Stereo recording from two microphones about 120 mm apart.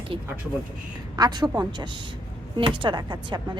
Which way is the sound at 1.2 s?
35° right (ahead or behind).